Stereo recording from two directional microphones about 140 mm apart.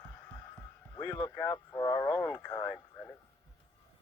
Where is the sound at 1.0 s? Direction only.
20° left (ahead or behind).